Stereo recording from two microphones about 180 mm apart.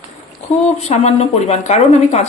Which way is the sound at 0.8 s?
35° left (ahead or behind).